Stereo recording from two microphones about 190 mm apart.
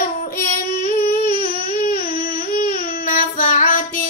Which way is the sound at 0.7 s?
50° left (ahead or behind).